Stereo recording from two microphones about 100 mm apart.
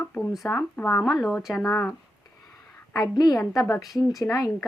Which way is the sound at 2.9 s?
40° left (ahead or behind).